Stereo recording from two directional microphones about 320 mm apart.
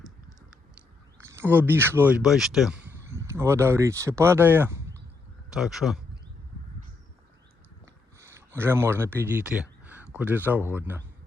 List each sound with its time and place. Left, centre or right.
1.2 s speech: centre
8.2 s speech: centre